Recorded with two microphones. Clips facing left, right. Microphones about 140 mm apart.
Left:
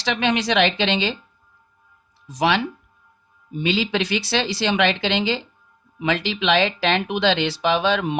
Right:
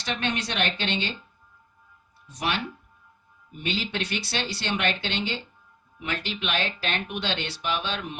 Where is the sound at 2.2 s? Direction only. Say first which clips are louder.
Left 9 dB; 90° left.